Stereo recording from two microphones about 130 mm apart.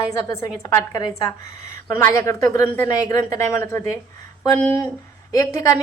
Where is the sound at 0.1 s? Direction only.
25° left (ahead or behind).